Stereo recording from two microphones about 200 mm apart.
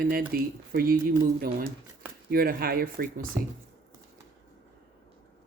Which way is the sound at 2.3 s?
45° right (ahead or behind).